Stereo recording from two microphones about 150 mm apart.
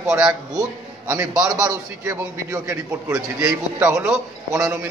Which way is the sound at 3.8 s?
5° right (ahead or behind).